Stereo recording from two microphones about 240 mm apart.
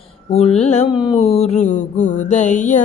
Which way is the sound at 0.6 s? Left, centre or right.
Left.